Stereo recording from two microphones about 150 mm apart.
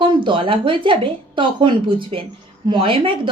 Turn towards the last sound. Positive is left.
turn(degrees=-35)  # may be behind; listen again after turning